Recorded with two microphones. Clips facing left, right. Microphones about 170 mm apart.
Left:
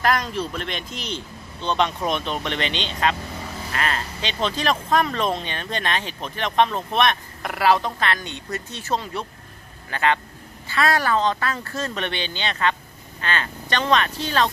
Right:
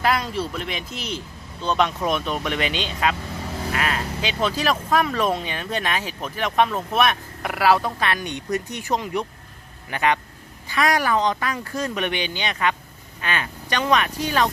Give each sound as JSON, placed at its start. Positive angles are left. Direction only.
{"t": 0.0, "sound": "a man's voice", "side_deg": -5}